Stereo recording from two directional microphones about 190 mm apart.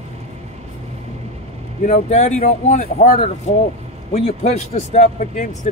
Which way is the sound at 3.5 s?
35° left (ahead or behind).